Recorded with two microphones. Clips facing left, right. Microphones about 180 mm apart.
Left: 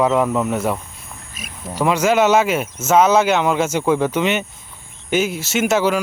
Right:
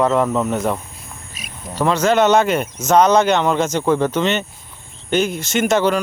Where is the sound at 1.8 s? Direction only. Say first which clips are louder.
Even; 10° left (ahead or behind).